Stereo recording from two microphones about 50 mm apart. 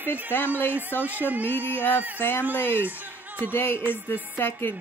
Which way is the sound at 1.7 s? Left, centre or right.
Left.